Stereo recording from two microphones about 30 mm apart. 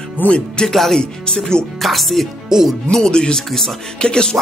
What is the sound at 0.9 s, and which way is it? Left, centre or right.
Speech, left.